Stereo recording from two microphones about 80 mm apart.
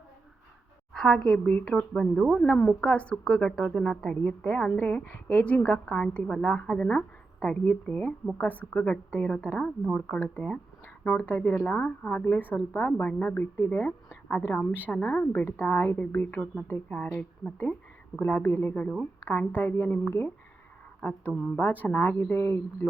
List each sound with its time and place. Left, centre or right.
0.9 s a woman's voice: centre
1.5 s a woman's voice: centre